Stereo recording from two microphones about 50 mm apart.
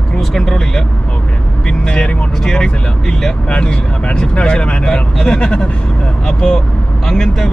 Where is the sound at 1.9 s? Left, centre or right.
Centre.